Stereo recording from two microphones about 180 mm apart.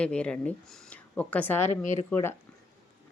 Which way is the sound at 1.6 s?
40° left (ahead or behind).